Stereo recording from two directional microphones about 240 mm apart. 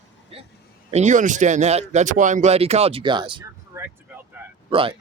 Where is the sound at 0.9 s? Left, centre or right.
Right.